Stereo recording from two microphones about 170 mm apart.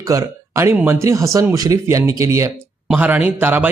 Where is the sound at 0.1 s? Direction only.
15° right (ahead or behind).